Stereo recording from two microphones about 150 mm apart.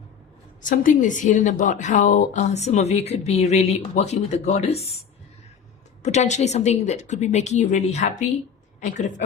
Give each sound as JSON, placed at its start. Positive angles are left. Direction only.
{"t": 0.6, "sound": "a woman's voice", "side_deg": 60}
{"t": 6.0, "sound": "a woman's voice", "side_deg": 50}